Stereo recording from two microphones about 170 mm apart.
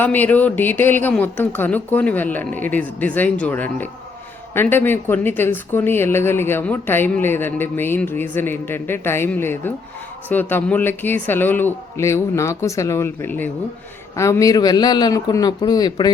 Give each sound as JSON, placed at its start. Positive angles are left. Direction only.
{"t": 0.0, "sound": "a man's voice", "side_deg": 10}